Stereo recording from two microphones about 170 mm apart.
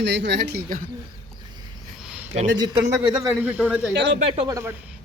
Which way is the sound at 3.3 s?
10° right (ahead or behind).